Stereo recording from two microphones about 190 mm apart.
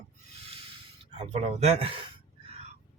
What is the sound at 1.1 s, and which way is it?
Speech, 35° right (ahead or behind).